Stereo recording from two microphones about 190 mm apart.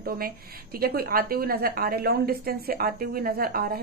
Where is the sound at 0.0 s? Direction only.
50° right (ahead or behind).